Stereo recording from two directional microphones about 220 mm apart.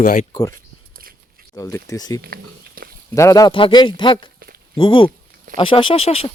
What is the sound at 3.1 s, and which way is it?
Speech, 15° left (ahead or behind).